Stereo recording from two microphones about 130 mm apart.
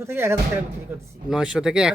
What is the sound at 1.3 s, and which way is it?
Speech, 5° right (ahead or behind).